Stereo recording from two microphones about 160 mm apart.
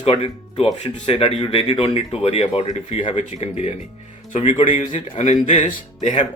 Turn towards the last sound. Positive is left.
turn(degrees=50)  # may be behind; listen again after turning